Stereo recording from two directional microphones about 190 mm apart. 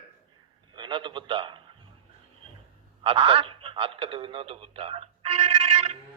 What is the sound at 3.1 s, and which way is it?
A man's voice, 30° right (ahead or behind).